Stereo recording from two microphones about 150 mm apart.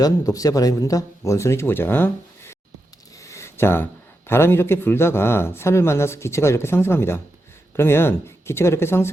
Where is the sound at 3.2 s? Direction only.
20° left (ahead or behind).